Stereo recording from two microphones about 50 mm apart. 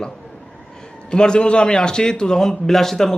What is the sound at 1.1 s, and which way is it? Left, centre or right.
A man's voice, centre.